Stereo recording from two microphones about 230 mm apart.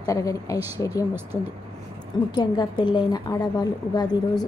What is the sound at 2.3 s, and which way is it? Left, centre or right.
A woman's voice, centre.